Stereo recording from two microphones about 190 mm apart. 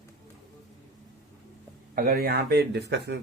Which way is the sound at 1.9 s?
50° right (ahead or behind).